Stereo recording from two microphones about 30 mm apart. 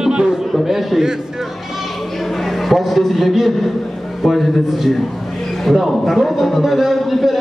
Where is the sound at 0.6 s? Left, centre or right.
Centre.